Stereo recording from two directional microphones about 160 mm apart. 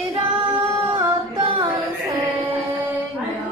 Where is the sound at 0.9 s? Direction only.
35° right (ahead or behind).